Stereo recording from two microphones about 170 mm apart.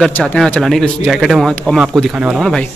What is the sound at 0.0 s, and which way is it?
Speech, 5° left (ahead or behind).